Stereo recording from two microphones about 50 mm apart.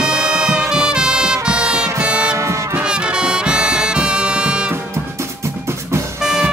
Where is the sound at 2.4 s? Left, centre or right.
Right.